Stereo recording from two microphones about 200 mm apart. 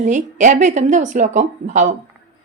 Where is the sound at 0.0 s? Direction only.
40° right (ahead or behind).